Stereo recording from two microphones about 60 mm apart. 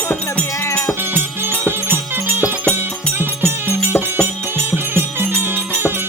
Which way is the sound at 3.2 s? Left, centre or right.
Right.